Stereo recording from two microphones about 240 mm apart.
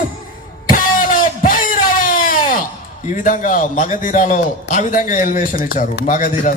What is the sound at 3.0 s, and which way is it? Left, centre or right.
A man's voice, left.